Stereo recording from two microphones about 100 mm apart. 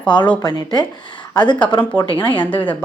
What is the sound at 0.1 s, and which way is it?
Speech, 50° left (ahead or behind).